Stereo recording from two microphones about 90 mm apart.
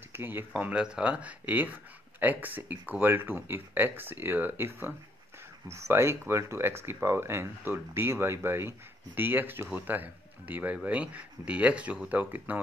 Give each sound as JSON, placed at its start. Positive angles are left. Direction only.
{"t": 0.1, "sound": "speech", "side_deg": -25}